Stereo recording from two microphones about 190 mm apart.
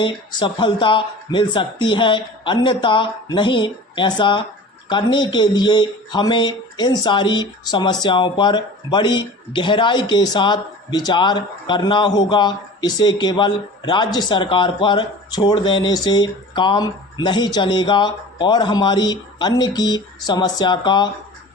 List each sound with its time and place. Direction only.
0.0 s speech: 25° left (ahead or behind)